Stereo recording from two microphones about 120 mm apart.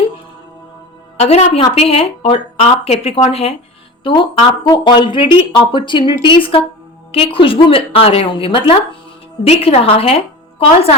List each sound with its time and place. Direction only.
1.1 s a woman's voice: 60° left (ahead or behind)
4.0 s speech: 45° left (ahead or behind)